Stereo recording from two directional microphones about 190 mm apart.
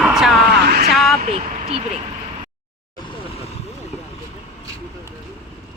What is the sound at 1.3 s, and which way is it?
Vehicle, 30° right (ahead or behind).